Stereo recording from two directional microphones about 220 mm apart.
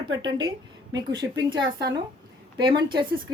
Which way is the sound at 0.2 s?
20° right (ahead or behind).